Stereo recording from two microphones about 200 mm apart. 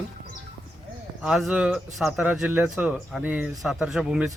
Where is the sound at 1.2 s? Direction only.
5° right (ahead or behind).